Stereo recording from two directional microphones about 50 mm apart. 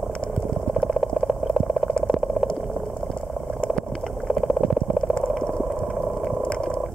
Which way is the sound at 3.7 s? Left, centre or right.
Centre.